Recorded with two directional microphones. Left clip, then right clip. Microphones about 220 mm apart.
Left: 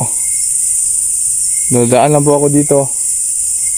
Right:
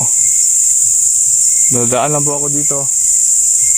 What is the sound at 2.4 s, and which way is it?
Speech, 35° left (ahead or behind).